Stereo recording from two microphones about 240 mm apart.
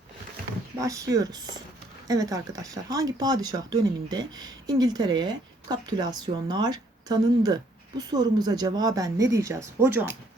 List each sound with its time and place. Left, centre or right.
0.8 s speech: centre